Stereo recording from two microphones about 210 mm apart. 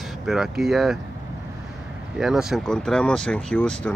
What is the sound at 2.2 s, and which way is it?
Speech, centre (ahead or behind).